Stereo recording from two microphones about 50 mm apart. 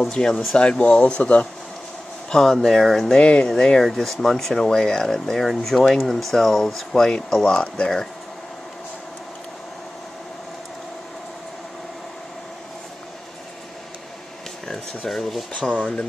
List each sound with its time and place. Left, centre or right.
0.0 s speech: centre
2.3 s speech: centre
3.2 s speech: centre
15.0 s speech: centre
15.5 s speech: left